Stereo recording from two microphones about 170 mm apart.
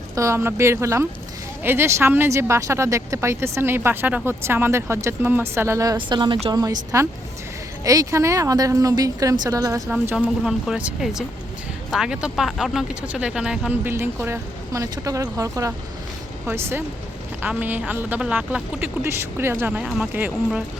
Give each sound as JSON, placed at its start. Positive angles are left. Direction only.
{"t": 0.2, "sound": "speech", "side_deg": -15}
{"t": 9.9, "sound": "speech", "side_deg": -10}